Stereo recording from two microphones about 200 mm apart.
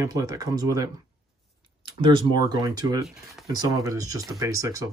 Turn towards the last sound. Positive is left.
turn(degrees=-15)  # may be behind; listen again after turning